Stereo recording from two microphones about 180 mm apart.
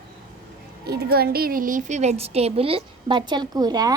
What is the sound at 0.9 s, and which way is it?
A woman's voice, 60° right (ahead or behind).